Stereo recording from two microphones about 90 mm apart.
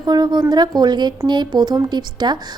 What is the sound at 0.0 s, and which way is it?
A woman's voice, 55° right (ahead or behind).